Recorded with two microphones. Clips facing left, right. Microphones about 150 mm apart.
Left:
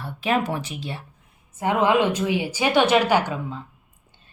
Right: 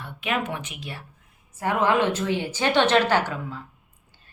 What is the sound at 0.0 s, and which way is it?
A woman's voice, 35° left (ahead or behind).